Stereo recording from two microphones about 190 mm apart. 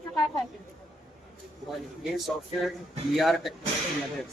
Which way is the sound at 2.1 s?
Centre (ahead or behind).